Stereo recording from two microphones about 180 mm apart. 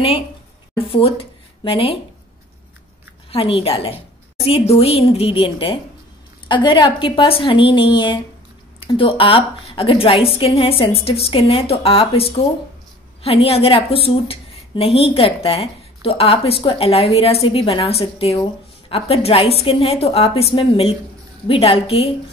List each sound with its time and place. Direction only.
0.7 s speech: 30° left (ahead or behind)
3.3 s a woman's voice: 30° left (ahead or behind)